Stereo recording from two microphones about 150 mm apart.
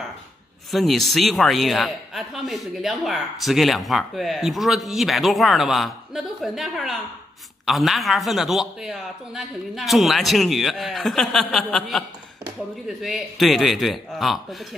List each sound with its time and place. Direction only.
0.7 s a man's voice: centre (ahead or behind)